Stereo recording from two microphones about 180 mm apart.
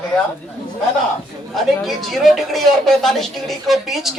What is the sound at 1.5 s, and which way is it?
A man's voice, centre (ahead or behind).